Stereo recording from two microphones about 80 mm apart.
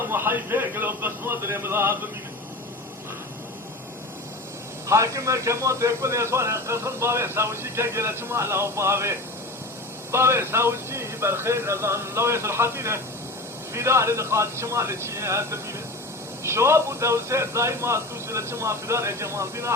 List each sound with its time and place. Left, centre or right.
0.1 s a man's voice: right
4.9 s a man's voice: right